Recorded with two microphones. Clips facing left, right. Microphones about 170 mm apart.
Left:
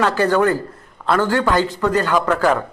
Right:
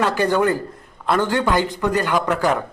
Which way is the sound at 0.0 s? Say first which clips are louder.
Left 2 dB; 15° right (ahead or behind).